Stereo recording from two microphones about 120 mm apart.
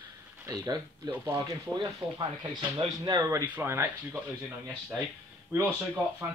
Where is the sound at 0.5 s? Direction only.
35° right (ahead or behind).